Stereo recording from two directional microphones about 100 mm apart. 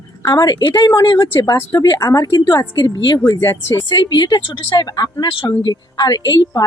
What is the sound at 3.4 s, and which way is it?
Speech, 25° left (ahead or behind).